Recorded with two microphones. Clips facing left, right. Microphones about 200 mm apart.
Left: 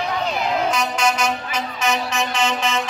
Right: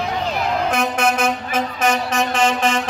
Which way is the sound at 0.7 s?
60° right (ahead or behind).